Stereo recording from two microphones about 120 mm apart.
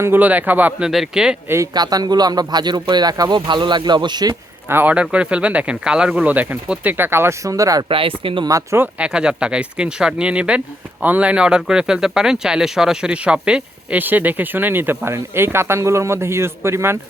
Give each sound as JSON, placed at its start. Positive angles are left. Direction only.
{"t": 0.0, "sound": "a man's voice", "side_deg": -15}
{"t": 0.9, "sound": "speech", "side_deg": -5}
{"t": 1.5, "sound": "speech", "side_deg": -25}
{"t": 4.7, "sound": "a man's voice", "side_deg": -15}
{"t": 7.9, "sound": "speech", "side_deg": -50}
{"t": 8.4, "sound": "speech", "side_deg": -25}
{"t": 8.8, "sound": "a man's voice", "side_deg": -10}